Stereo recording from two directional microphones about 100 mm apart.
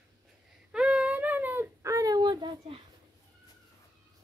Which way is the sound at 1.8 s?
35° right (ahead or behind).